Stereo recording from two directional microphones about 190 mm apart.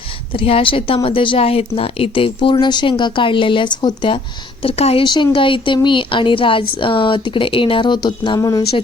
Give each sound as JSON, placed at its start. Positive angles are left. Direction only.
{"t": 0.3, "sound": "speech", "side_deg": 30}